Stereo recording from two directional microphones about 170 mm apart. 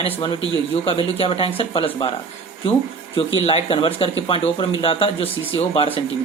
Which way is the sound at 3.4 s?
35° left (ahead or behind).